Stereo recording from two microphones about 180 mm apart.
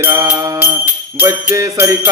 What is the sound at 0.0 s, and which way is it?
Jingle bell, 15° right (ahead or behind).